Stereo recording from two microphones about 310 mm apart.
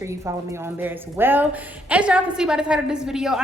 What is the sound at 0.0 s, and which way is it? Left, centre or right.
A woman's voice, centre.